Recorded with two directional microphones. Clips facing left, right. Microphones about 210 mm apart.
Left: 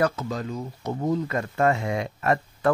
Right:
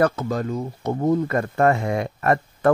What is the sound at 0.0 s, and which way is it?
Speech, 55° right (ahead or behind).